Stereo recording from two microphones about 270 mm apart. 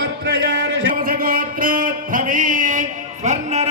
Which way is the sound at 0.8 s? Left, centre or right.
Right.